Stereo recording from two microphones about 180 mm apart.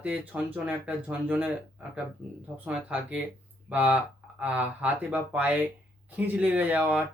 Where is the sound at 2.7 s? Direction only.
5° right (ahead or behind).